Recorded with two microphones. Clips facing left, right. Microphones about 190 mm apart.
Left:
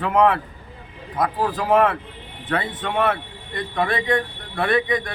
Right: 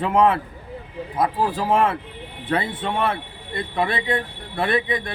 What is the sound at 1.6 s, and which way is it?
Speech, 25° right (ahead or behind).